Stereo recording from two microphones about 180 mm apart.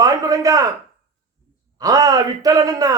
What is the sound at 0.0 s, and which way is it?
Speech, 20° right (ahead or behind).